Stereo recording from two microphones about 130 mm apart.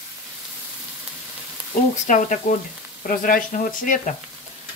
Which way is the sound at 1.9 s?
70° left (ahead or behind).